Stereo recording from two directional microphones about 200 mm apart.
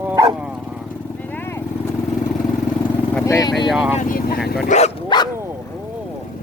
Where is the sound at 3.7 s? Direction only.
5° right (ahead or behind).